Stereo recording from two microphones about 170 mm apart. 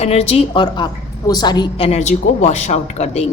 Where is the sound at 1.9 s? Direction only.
40° left (ahead or behind).